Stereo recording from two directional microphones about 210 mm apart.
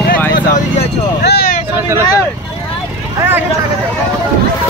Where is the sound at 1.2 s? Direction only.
45° left (ahead or behind).